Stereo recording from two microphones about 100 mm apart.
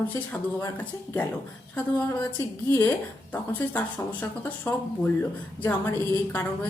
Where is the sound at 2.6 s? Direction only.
25° left (ahead or behind).